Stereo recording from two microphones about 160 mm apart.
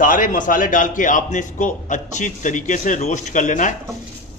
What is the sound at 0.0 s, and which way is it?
A man's voice, 55° left (ahead or behind).